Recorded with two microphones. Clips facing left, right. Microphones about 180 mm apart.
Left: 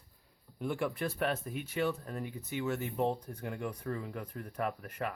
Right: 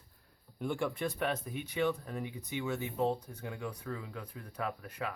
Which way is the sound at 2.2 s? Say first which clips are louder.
Left 3 dB; 15° right (ahead or behind).